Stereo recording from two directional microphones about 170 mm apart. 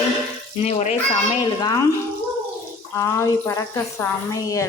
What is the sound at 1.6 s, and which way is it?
Speech, 25° left (ahead or behind).